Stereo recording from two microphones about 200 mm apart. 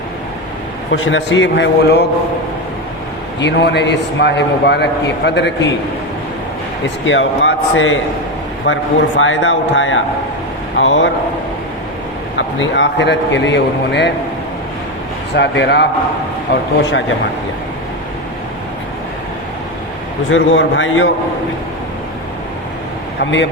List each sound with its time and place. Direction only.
0.9 s a man's voice: 70° left (ahead or behind)
3.4 s a man's voice: 60° left (ahead or behind)
7.0 s a man's voice: 70° left (ahead or behind)
12.4 s a man's voice: 70° left (ahead or behind)
15.4 s a man's voice: 60° left (ahead or behind)
20.3 s a man's voice: 75° left (ahead or behind)
23.2 s a man's voice: 65° left (ahead or behind)